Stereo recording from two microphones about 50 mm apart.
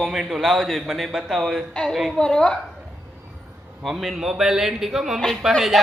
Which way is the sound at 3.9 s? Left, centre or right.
Centre.